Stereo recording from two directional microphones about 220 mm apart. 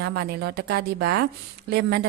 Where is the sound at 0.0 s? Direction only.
45° right (ahead or behind).